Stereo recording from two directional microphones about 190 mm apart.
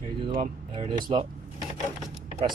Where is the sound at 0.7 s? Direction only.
25° right (ahead or behind).